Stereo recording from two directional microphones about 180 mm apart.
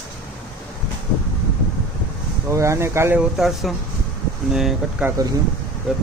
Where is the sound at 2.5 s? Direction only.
15° right (ahead or behind).